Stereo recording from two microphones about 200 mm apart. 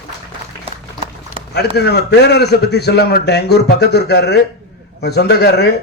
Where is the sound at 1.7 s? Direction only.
55° left (ahead or behind).